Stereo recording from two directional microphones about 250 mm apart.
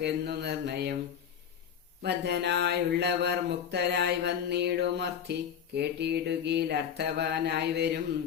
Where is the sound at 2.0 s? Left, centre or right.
Right.